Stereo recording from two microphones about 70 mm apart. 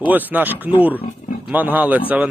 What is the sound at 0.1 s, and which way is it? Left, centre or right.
Speech, right.